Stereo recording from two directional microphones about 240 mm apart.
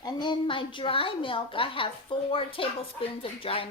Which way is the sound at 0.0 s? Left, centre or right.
Centre.